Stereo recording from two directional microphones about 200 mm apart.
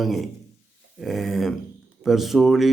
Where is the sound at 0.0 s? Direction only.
Centre (ahead or behind).